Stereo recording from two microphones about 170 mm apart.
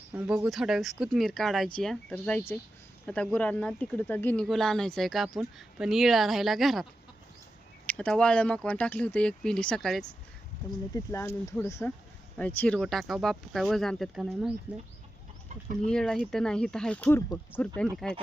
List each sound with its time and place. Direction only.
0.1 s speech: 5° right (ahead or behind)
7.9 s speech: 5° left (ahead or behind)
10.9 s speech: 15° left (ahead or behind); by 14.5 s centre (ahead or behind)
15.9 s speech: 5° left (ahead or behind)